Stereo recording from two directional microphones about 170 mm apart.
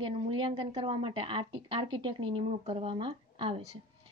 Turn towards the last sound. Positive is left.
turn(degrees=-30)  # may be behind; listen again after turning